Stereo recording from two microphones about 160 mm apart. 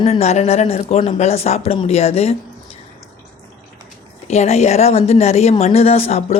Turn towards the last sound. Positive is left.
turn(degrees=40)  # may be behind; listen again after turning